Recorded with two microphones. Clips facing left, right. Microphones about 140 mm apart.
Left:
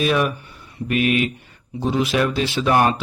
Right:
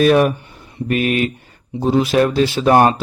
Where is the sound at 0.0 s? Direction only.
45° right (ahead or behind).